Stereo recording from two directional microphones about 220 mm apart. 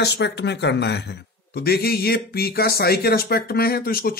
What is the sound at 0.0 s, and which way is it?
Speech, 50° left (ahead or behind).